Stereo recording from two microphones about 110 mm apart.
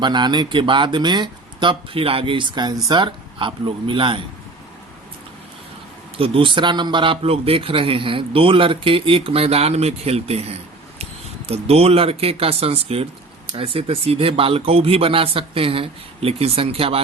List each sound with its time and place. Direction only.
0.0 s speech: 45° right (ahead or behind)
6.1 s a man's voice: 55° right (ahead or behind)